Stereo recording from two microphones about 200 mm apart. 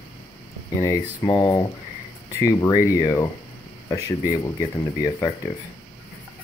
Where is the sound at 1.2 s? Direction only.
20° left (ahead or behind).